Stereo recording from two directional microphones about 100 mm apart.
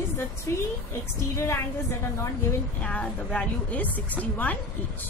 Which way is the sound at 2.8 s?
10° left (ahead or behind).